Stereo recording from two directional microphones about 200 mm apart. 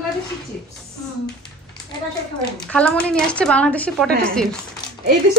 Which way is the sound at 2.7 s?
5° left (ahead or behind).